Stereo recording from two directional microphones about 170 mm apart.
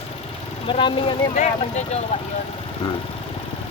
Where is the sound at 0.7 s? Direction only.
30° left (ahead or behind).